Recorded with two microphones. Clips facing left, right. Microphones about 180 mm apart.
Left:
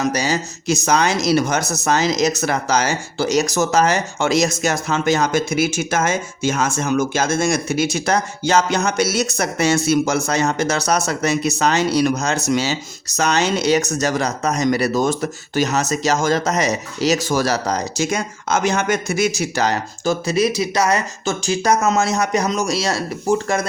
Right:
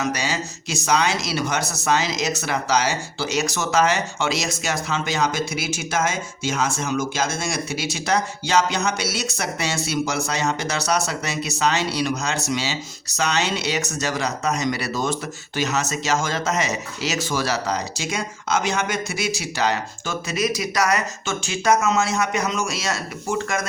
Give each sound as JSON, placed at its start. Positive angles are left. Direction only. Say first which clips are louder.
{"t": 0.0, "sound": "speech", "louder": "left 5 dB", "side_deg": 40}